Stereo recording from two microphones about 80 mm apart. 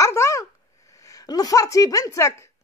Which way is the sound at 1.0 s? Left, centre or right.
Left.